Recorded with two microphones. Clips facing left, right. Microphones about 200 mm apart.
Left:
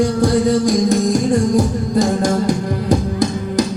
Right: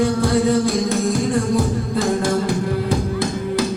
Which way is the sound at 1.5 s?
45° left (ahead or behind).